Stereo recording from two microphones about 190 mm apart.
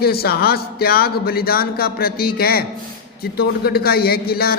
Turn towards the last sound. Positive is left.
turn(degrees=55)  # may be behind; listen again after turning